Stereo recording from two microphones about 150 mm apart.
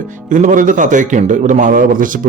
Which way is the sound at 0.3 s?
60° right (ahead or behind).